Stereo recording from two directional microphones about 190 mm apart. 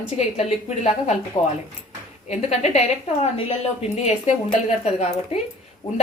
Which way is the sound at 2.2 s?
35° left (ahead or behind).